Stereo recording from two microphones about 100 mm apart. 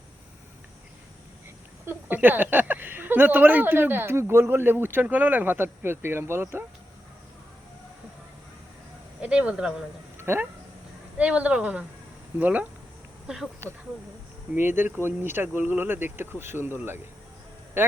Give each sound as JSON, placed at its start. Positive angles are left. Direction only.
{"t": 1.9, "sound": "speech", "side_deg": -20}
{"t": 9.2, "sound": "speech", "side_deg": -15}
{"t": 10.2, "sound": "a sound", "side_deg": -25}
{"t": 11.2, "sound": "speech", "side_deg": -15}
{"t": 14.5, "sound": "a man's voice", "side_deg": -20}